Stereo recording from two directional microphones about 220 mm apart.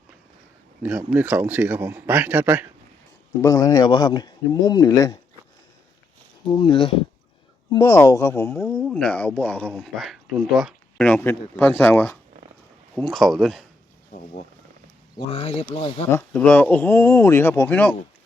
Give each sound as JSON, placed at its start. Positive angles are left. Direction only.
{"t": 0.8, "sound": "speech", "side_deg": -10}
{"t": 3.4, "sound": "speech", "side_deg": 15}
{"t": 6.5, "sound": "speech", "side_deg": 20}
{"t": 14.1, "sound": "speech", "side_deg": 35}
{"t": 15.1, "sound": "speech", "side_deg": 25}
{"t": 16.0, "sound": "speech", "side_deg": 10}